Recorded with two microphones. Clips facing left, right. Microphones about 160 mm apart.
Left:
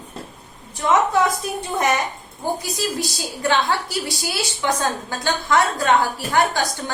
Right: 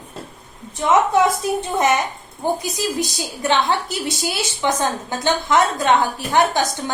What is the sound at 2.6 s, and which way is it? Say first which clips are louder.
A woman's voice: right 2 dB; 20° right (ahead or behind).